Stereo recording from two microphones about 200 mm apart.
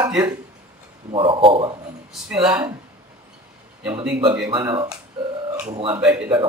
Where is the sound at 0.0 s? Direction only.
15° right (ahead or behind).